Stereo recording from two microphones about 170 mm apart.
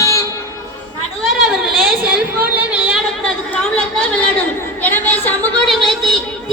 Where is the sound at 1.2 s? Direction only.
Centre (ahead or behind).